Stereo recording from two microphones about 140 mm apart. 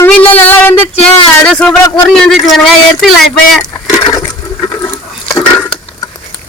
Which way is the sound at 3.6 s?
30° left (ahead or behind).